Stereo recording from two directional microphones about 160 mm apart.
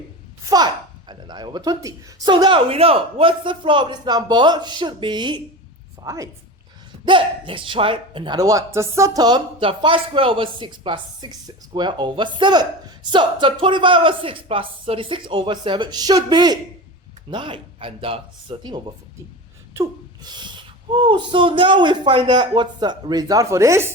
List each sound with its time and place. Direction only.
0.4 s a woman's voice: 25° right (ahead or behind)
7.1 s speech: 30° right (ahead or behind)
19.7 s a sound: 25° right (ahead or behind)
20.9 s speech: 30° right (ahead or behind)